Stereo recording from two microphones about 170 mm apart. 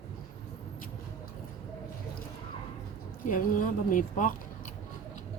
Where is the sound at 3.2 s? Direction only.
55° left (ahead or behind).